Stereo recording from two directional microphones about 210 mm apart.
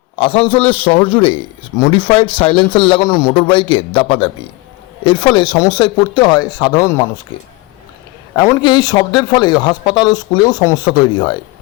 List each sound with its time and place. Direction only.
0.2 s speech: 25° left (ahead or behind)
8.4 s speech: 20° left (ahead or behind)